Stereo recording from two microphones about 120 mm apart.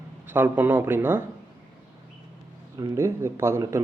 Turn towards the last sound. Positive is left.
turn(degrees=-25)  # may be behind; listen again after turning